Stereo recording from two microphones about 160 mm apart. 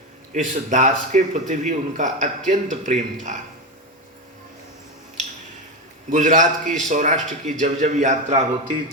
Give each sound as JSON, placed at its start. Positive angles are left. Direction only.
{"t": 0.3, "sound": "a man's voice", "side_deg": -50}
{"t": 6.1, "sound": "a man's voice", "side_deg": -50}